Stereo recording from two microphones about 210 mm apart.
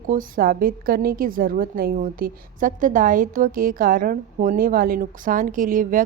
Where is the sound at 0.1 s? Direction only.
40° right (ahead or behind).